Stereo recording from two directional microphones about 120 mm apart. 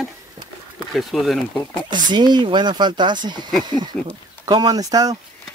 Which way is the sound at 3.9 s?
5° left (ahead or behind).